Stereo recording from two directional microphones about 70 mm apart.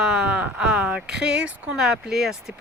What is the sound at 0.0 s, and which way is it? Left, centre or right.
Speech, centre.